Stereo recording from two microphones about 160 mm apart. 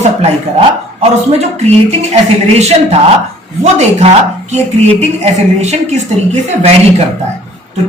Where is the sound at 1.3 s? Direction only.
45° right (ahead or behind).